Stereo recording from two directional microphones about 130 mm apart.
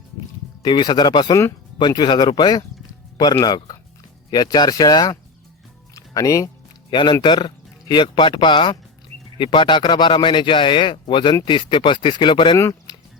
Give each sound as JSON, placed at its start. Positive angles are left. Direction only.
{"t": 0.6, "sound": "speech", "side_deg": 35}
{"t": 5.9, "sound": "music", "side_deg": 25}
{"t": 6.9, "sound": "speech", "side_deg": 35}
{"t": 12.5, "sound": "a sound", "side_deg": 25}